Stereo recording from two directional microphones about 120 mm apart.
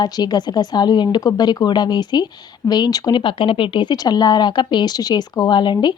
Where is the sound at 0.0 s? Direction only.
35° left (ahead or behind).